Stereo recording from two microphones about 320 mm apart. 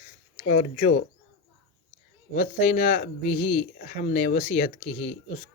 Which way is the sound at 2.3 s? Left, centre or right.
Left.